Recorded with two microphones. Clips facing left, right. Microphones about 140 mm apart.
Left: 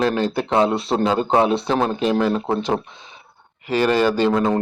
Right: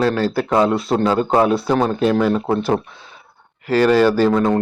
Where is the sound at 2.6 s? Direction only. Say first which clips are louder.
Right 3 dB; 20° left (ahead or behind).